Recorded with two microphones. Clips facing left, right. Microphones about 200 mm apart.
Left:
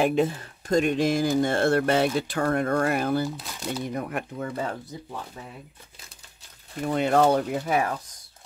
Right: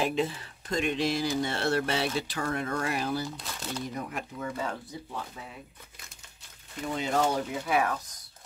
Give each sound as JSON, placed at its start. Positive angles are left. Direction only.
{"t": 0.0, "sound": "speech", "side_deg": 50}
{"t": 6.8, "sound": "speech", "side_deg": 60}
{"t": 7.6, "sound": "speech", "side_deg": 40}